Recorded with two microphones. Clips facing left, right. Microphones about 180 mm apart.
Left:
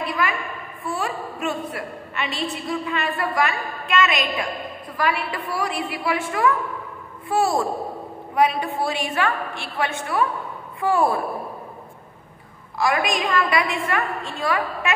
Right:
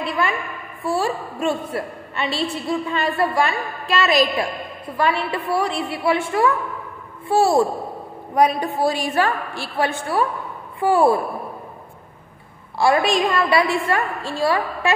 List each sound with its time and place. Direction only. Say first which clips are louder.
0.8 s a woman's voice: right 5 dB; 30° right (ahead or behind)
8.4 s a woman's voice: right 3 dB; 40° right (ahead or behind)
12.7 s a woman's voice: right 5 dB; 30° right (ahead or behind)